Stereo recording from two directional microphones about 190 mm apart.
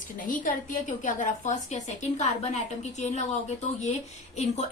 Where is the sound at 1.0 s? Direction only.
40° left (ahead or behind).